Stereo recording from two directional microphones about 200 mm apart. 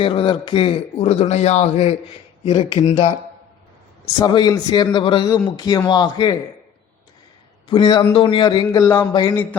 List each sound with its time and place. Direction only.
0.0 s speech: 25° left (ahead or behind)
4.2 s speech: 20° left (ahead or behind)
7.7 s speech: 20° left (ahead or behind)
9.3 s speech: 10° left (ahead or behind)